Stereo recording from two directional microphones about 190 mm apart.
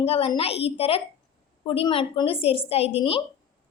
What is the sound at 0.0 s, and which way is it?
A woman's voice, 30° left (ahead or behind).